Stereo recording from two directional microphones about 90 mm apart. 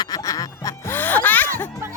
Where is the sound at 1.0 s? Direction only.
20° left (ahead or behind).